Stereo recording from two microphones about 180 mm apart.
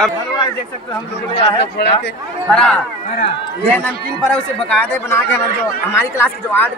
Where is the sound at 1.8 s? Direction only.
70° left (ahead or behind).